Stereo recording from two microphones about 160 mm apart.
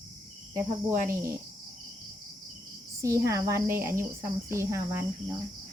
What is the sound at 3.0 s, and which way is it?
Speech, 20° right (ahead or behind).